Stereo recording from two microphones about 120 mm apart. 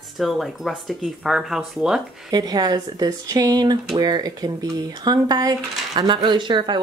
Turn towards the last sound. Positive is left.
turn(degrees=-40)  # may be behind; listen again after turning